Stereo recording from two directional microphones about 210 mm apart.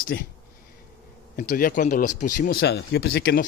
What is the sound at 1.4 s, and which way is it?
Speech, 40° left (ahead or behind).